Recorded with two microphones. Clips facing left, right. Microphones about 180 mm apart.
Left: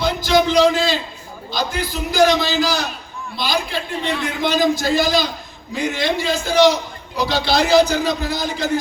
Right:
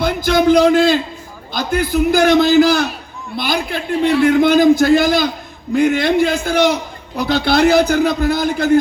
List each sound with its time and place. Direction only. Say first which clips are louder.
0.0 s a man's voice: right 3 dB; 55° right (ahead or behind)